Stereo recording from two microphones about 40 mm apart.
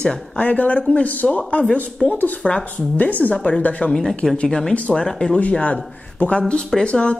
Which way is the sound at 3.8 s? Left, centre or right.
Centre.